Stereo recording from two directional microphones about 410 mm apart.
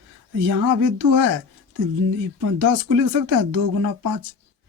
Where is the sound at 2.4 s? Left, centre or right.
Right.